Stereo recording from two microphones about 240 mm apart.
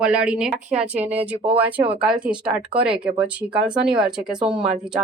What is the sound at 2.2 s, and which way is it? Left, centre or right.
A woman's voice, centre.